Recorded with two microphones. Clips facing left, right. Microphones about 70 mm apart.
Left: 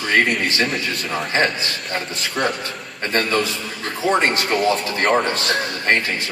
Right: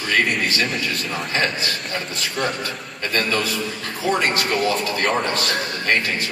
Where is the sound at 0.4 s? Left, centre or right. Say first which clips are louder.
Left 1 dB; left.